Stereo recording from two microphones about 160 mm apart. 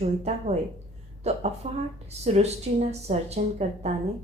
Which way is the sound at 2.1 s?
40° right (ahead or behind).